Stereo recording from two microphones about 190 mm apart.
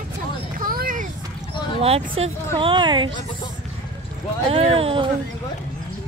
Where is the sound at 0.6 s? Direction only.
45° right (ahead or behind).